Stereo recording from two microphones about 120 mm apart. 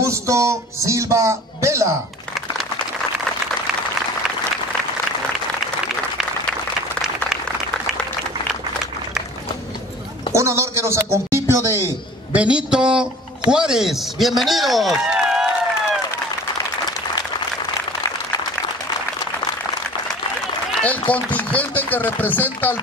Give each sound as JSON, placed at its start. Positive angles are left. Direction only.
{"t": 0.0, "sound": "speech", "side_deg": -25}
{"t": 10.3, "sound": "speech", "side_deg": -25}
{"t": 12.4, "sound": "a man's voice", "side_deg": -10}
{"t": 21.1, "sound": "speech", "side_deg": 10}